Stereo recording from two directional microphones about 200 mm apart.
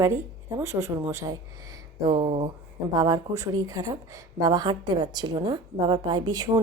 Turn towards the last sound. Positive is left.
turn(degrees=-20)  # may be behind; listen again after turning